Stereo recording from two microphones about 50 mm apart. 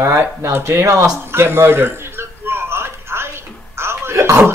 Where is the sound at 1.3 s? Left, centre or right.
Right.